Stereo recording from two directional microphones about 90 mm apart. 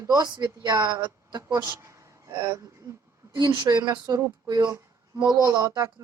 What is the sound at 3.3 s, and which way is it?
Speech, 55° right (ahead or behind).